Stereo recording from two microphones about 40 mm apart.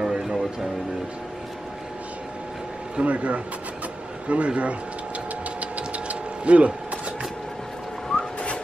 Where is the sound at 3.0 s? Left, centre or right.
Right.